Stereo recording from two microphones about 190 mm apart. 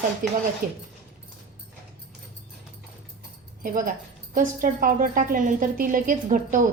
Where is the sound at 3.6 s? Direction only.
45° right (ahead or behind).